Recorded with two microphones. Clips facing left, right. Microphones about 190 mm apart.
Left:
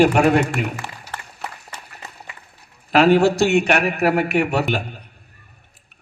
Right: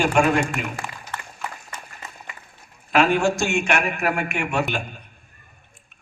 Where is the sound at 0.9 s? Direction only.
35° left (ahead or behind).